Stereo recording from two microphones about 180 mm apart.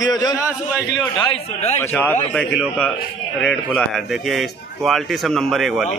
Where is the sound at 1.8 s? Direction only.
10° left (ahead or behind).